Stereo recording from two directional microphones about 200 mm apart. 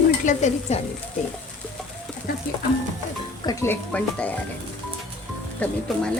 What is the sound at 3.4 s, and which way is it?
Speech, 10° left (ahead or behind).